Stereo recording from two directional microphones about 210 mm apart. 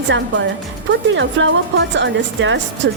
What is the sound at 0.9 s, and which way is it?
A woman's voice, 60° right (ahead or behind).